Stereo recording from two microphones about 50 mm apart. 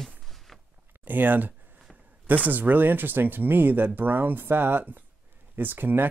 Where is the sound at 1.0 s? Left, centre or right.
Right.